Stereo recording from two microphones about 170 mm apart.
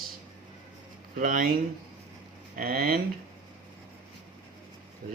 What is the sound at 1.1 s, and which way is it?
Speech, 55° right (ahead or behind).